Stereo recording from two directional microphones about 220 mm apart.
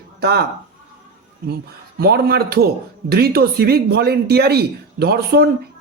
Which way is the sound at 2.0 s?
45° right (ahead or behind).